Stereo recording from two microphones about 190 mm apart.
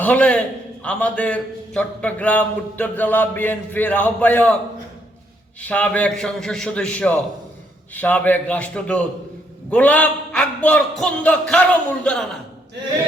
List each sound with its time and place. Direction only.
0.0 s a man's voice: 10° left (ahead or behind)
5.6 s a man's voice: 5° left (ahead or behind)